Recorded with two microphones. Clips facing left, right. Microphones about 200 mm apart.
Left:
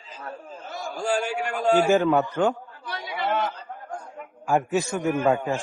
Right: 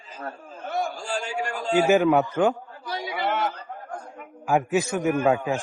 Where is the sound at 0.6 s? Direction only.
60° right (ahead or behind).